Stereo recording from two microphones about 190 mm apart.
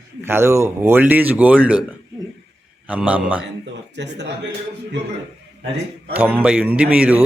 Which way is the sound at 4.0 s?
65° right (ahead or behind).